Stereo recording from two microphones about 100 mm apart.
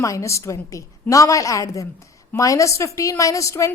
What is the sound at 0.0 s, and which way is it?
A woman's voice, 30° left (ahead or behind).